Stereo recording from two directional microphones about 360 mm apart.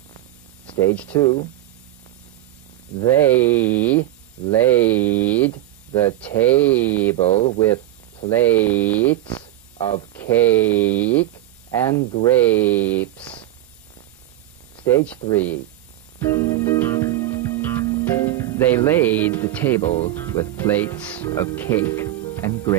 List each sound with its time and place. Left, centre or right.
0.7 s speech: centre
3.0 s speech: centre
7.2 s speech: centre
14.8 s speech: centre
16.2 s music: centre
19.9 s speech: centre